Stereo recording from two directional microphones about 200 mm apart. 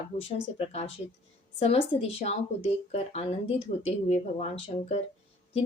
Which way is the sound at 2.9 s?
30° left (ahead or behind).